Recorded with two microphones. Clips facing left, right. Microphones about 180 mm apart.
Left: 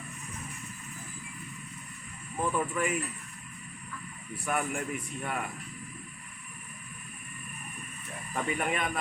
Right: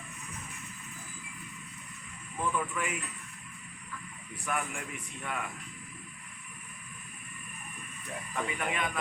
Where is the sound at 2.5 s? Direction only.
40° left (ahead or behind).